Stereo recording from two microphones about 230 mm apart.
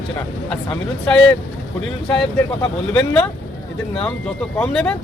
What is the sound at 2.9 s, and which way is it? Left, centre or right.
Speech, centre.